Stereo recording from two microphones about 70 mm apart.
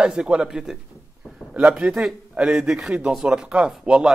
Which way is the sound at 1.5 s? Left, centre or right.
Right.